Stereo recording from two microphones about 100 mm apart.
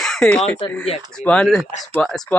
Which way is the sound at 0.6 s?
65° left (ahead or behind).